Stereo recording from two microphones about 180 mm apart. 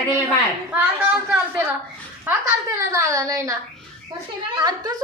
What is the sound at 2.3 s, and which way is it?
Speech, 10° right (ahead or behind).